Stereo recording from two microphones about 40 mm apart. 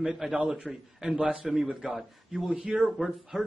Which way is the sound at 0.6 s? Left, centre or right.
Centre.